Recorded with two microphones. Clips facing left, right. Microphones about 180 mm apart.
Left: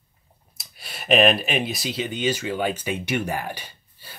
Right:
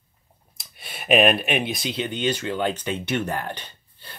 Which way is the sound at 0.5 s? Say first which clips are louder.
Even; centre (ahead or behind).